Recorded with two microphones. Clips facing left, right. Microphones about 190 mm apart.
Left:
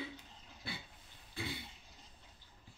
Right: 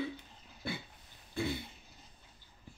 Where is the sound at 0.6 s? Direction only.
50° right (ahead or behind).